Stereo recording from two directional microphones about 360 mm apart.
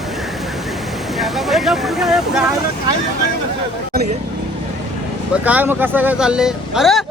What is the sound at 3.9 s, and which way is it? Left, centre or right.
Vehicle, right.